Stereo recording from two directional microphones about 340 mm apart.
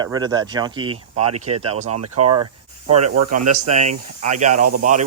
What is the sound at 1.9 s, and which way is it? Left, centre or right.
Speech, right.